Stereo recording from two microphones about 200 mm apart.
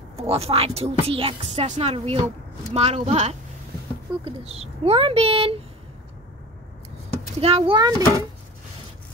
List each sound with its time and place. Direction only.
0.1 s a woman's voice: 30° right (ahead or behind)
7.3 s a woman's voice: 30° right (ahead or behind)